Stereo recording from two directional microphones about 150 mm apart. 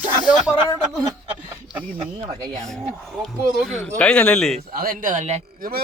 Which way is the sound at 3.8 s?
5° left (ahead or behind).